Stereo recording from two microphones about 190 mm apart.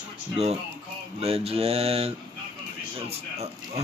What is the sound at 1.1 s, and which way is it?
Speech, 30° right (ahead or behind).